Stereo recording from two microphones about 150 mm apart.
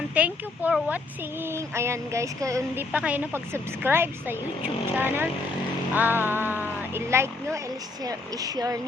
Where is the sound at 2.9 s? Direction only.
10° right (ahead or behind).